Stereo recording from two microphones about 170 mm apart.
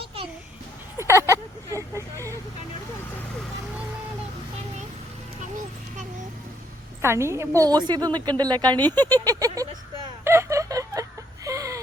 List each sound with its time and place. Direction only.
0.9 s vehicle: 15° right (ahead or behind)
7.0 s a woman's voice: 15° right (ahead or behind)
8.9 s a sound: 20° right (ahead or behind)